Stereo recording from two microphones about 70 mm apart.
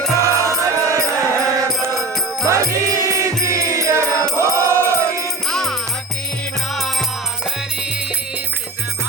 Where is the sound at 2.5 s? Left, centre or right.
Right.